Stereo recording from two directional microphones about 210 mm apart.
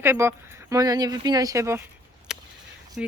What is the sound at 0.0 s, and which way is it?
Speech, 10° right (ahead or behind).